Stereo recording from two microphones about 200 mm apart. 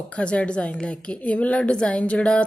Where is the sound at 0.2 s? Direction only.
5° left (ahead or behind).